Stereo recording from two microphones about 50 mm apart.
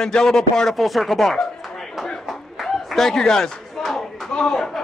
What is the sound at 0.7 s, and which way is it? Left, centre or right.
Speech, centre.